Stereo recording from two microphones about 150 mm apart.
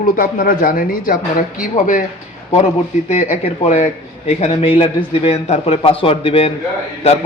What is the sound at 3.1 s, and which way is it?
Speech, 55° left (ahead or behind).